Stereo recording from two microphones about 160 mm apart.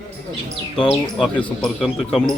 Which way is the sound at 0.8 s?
5° left (ahead or behind).